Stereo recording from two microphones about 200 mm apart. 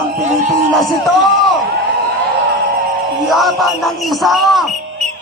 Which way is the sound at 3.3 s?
Centre (ahead or behind).